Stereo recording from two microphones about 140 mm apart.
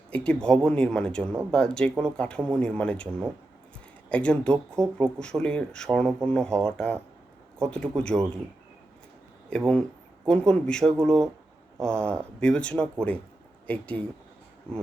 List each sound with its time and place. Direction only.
0.1 s speech: 5° left (ahead or behind)
4.1 s speech: 10° left (ahead or behind)
9.5 s speech: 5° left (ahead or behind)